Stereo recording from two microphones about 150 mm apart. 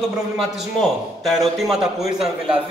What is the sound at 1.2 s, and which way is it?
A man's voice, centre (ahead or behind).